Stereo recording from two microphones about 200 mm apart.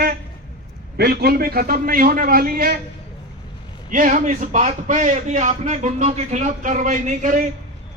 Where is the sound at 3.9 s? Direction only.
40° right (ahead or behind).